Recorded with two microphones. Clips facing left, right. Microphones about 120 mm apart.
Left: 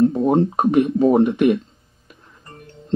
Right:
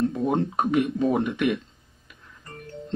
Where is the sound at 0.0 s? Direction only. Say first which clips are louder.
Left 8 dB; 35° left (ahead or behind).